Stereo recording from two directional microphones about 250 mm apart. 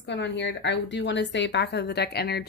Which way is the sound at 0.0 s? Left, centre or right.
Left.